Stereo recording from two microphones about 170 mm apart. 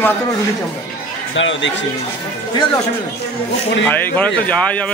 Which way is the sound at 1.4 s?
90° left.